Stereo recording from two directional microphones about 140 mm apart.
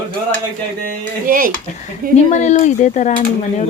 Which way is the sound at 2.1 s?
55° left (ahead or behind).